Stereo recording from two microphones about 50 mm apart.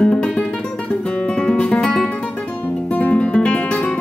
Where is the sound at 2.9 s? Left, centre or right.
Left.